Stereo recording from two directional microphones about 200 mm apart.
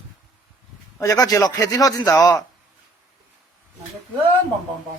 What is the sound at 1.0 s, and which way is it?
Speech, 15° left (ahead or behind).